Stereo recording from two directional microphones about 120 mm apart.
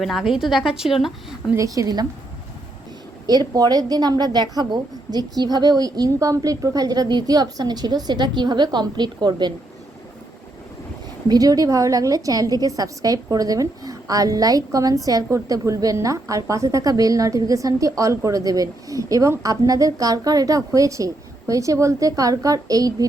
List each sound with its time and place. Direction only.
0.0 s a woman's voice: centre (ahead or behind)
1.5 s a woman's voice: 30° right (ahead or behind)
3.2 s a woman's voice: 35° right (ahead or behind)
11.3 s a woman's voice: 30° right (ahead or behind)